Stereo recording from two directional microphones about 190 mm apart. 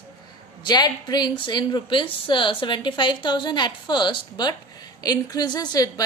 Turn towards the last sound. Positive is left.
turn(degrees=20)  # may be behind; listen again after turning